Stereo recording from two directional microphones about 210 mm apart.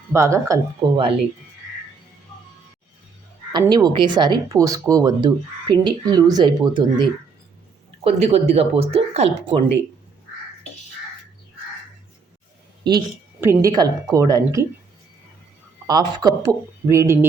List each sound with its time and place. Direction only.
0.1 s speech: 15° right (ahead or behind)
3.5 s speech: 20° right (ahead or behind)
13.4 s speech: 15° right (ahead or behind)
15.9 s speech: 20° right (ahead or behind)